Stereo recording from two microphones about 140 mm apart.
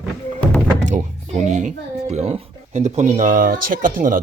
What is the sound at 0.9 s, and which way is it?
A child's voice, 60° right (ahead or behind).